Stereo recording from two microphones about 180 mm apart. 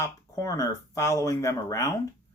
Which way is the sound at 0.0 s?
20° left (ahead or behind).